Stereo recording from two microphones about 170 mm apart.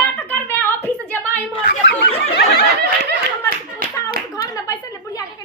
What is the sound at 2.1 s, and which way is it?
Snicker, 70° left (ahead or behind).